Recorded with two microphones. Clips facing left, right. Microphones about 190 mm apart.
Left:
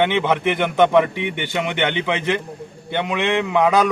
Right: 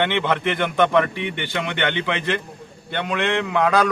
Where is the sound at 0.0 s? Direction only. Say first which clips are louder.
Left 3 dB; 15° left (ahead or behind).